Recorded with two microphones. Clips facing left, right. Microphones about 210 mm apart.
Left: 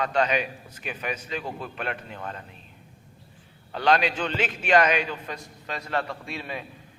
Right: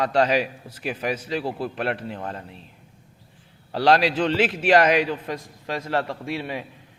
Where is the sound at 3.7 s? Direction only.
35° right (ahead or behind).